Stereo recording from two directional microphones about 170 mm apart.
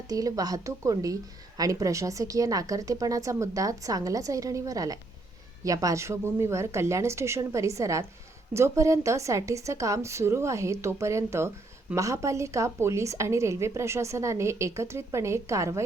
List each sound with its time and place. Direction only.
0.1 s a woman's voice: 20° right (ahead or behind)